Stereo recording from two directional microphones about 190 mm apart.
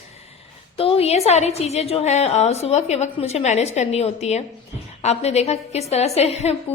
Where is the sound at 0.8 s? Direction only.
30° left (ahead or behind).